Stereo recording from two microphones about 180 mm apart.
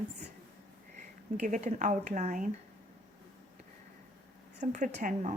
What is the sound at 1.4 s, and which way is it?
A woman's voice, 40° right (ahead or behind).